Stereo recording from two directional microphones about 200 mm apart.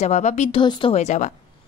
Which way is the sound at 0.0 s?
35° left (ahead or behind).